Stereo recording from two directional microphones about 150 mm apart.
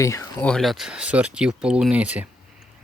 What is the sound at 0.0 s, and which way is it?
Speech, 20° left (ahead or behind).